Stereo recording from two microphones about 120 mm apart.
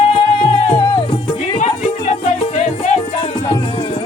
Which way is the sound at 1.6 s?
70° left (ahead or behind).